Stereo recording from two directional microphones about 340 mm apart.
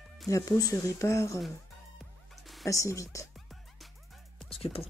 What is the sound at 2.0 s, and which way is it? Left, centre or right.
Music, centre.